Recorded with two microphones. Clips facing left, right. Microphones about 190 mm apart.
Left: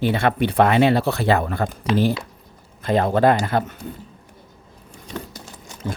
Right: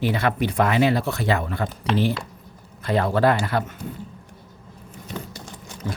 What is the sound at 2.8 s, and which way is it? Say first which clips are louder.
Speech: left 3 dB; 20° left (ahead or behind).